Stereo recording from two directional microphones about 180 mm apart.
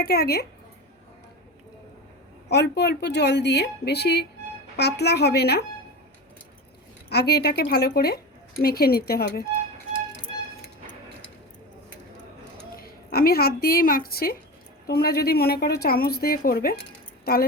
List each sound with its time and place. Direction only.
0.0 s a woman's voice: 60° left (ahead or behind)
2.5 s a woman's voice: 65° left (ahead or behind)
7.1 s a woman's voice: 65° left (ahead or behind)
12.7 s a woman's voice: 55° left (ahead or behind)